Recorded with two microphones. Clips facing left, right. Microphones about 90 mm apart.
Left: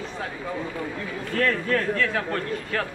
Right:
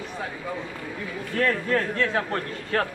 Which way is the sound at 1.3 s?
25° right (ahead or behind).